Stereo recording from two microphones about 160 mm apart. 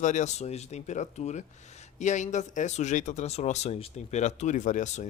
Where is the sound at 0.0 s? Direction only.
50° left (ahead or behind).